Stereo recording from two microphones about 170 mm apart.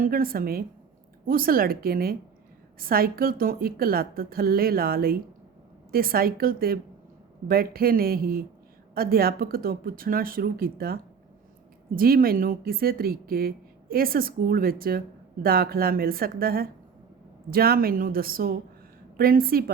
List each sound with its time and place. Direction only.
0.0 s speech: 55° right (ahead or behind)